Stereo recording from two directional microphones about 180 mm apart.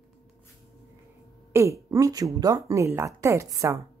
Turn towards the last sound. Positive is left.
turn(degrees=-15)  # may be behind; listen again after turning